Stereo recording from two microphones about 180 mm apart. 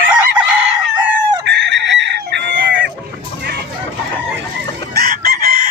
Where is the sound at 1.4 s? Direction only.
75° right (ahead or behind).